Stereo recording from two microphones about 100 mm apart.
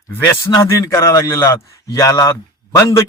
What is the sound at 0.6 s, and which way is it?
A man's voice, 30° left (ahead or behind).